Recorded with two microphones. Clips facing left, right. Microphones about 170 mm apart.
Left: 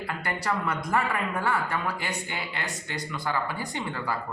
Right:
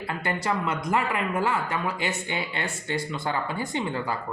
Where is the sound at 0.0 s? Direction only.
25° right (ahead or behind).